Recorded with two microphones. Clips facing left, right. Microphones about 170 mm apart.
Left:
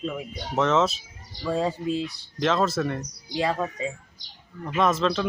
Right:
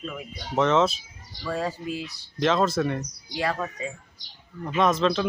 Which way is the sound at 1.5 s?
25° left (ahead or behind).